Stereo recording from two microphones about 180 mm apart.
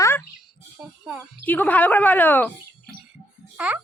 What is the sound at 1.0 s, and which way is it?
Speech, 5° right (ahead or behind).